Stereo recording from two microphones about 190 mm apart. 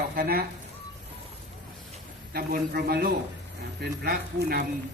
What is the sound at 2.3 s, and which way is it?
Speech, 50° right (ahead or behind).